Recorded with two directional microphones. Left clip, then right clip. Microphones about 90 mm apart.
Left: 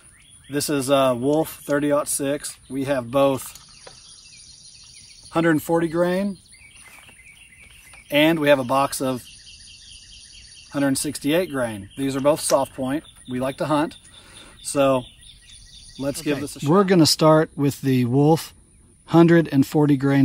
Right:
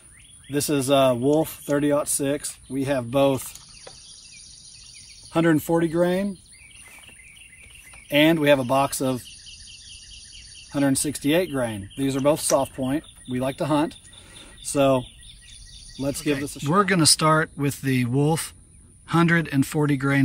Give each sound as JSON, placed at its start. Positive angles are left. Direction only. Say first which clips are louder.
{"t": 0.5, "sound": "speech", "louder": "left 1 dB", "side_deg": 40}
{"t": 5.3, "sound": "speech", "louder": "left 1 dB", "side_deg": 45}
{"t": 8.1, "sound": "speech", "louder": "left 1 dB", "side_deg": 45}
{"t": 10.7, "sound": "speech", "louder": "even", "side_deg": 35}